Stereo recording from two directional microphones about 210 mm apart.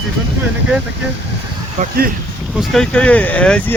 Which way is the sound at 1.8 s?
35° right (ahead or behind).